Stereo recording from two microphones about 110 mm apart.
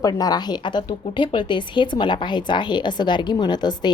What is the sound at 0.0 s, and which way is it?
Speech, 35° left (ahead or behind).